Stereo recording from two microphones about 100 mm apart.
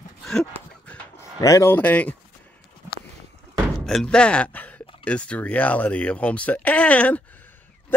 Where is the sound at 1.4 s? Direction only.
35° left (ahead or behind).